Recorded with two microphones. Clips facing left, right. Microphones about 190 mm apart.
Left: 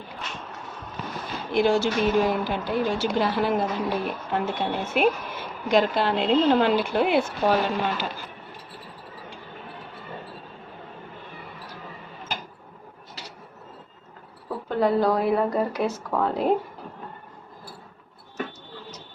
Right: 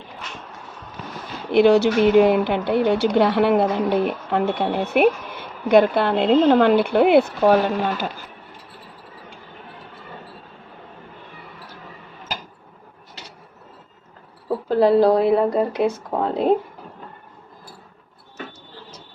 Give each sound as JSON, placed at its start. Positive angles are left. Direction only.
{"t": 1.5, "sound": "a woman's voice", "side_deg": -65}
{"t": 14.7, "sound": "a woman's voice", "side_deg": -30}